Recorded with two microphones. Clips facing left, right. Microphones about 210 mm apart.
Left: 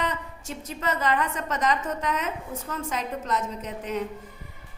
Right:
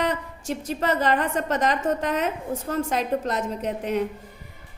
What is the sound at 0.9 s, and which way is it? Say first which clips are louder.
Speech: right 3 dB; 35° right (ahead or behind).